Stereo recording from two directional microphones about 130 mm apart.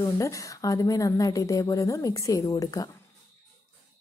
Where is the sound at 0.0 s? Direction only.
25° left (ahead or behind).